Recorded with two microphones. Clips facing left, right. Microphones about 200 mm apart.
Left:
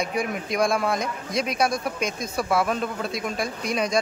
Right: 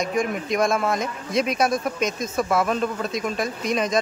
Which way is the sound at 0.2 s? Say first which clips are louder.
Right 2 dB; centre (ahead or behind).